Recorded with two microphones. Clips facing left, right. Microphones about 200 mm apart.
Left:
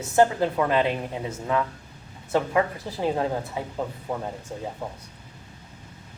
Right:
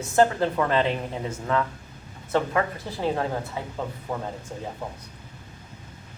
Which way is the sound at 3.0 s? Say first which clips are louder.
Left 1 dB; 15° left (ahead or behind).